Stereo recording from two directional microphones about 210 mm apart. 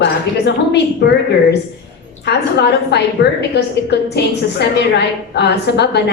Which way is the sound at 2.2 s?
55° left (ahead or behind).